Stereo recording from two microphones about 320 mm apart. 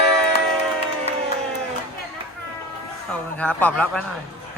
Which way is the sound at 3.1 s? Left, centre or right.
Centre.